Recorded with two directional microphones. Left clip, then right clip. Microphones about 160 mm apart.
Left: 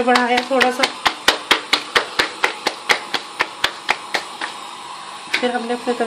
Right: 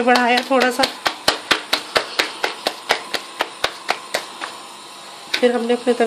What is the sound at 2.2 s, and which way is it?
Hands, 20° right (ahead or behind).